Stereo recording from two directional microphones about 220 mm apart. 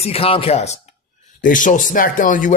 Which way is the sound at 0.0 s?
25° left (ahead or behind).